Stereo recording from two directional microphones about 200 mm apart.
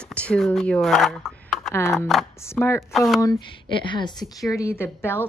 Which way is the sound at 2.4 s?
10° left (ahead or behind).